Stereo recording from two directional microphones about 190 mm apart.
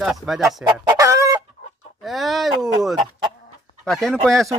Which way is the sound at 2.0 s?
Centre (ahead or behind).